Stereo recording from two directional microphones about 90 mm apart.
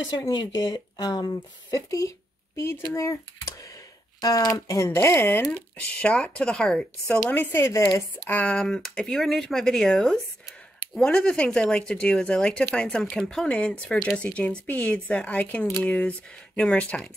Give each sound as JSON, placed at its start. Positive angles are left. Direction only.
{"t": 0.1, "sound": "speech", "side_deg": 50}
{"t": 5.5, "sound": "speech", "side_deg": 15}
{"t": 7.2, "sound": "speech", "side_deg": 20}